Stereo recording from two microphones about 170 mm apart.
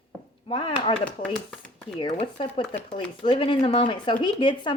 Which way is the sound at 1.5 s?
5° left (ahead or behind).